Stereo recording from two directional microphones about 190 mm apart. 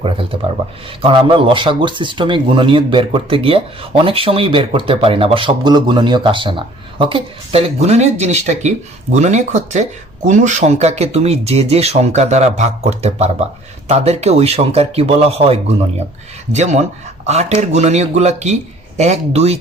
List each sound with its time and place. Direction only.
0.0 s speech: 30° right (ahead or behind)